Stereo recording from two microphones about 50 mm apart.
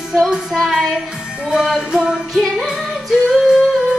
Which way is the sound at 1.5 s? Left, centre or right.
Centre.